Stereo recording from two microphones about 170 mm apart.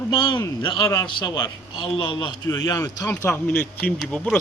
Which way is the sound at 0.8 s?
15° left (ahead or behind).